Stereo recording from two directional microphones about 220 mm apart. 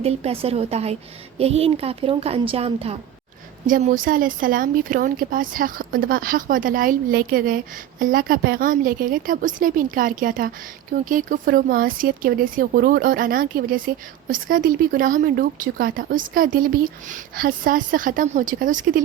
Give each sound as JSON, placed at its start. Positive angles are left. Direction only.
{"t": 0.0, "sound": "a woman's voice", "side_deg": -25}